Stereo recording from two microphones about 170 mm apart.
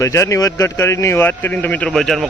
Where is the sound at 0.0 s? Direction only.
15° left (ahead or behind).